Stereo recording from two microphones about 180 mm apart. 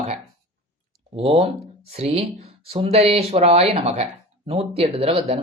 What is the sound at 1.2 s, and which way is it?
Speech, 30° right (ahead or behind).